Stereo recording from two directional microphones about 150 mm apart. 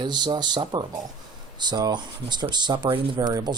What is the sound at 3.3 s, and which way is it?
Speech, 20° right (ahead or behind).